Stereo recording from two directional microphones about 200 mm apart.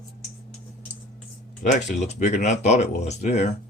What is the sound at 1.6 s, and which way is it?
Speech, 40° left (ahead or behind).